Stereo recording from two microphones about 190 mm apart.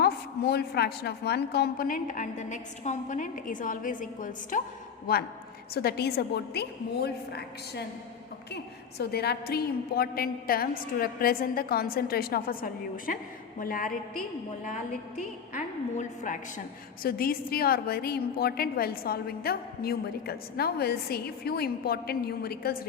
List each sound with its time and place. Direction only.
0.0 s a woman's voice: 55° left (ahead or behind); by 16.4 s 40° left (ahead or behind)
17.0 s a woman's voice: 50° left (ahead or behind)